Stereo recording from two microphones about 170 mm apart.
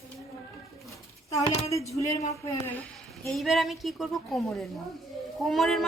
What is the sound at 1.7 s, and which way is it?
Speech, 20° left (ahead or behind).